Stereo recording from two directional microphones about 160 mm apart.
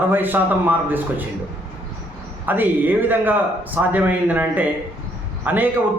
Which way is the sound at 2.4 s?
10° right (ahead or behind).